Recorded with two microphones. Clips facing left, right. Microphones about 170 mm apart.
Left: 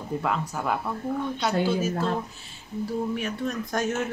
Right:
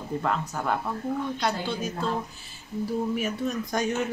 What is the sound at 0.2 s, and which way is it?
Speech, 5° left (ahead or behind).